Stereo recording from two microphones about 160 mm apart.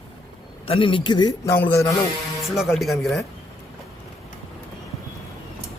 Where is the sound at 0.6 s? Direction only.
35° left (ahead or behind).